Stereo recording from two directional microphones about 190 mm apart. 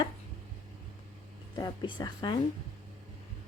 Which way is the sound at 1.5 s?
20° left (ahead or behind).